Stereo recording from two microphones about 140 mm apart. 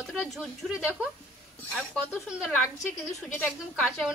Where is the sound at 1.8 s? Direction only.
5° right (ahead or behind).